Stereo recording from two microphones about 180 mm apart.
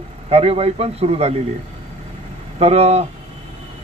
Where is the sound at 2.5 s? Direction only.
35° right (ahead or behind).